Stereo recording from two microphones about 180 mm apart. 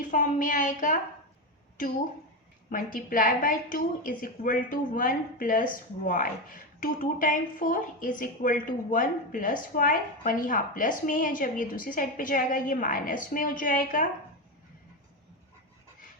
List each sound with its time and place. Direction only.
0.0 s a woman's voice: 45° left (ahead or behind)
2.6 s a woman's voice: 50° left (ahead or behind)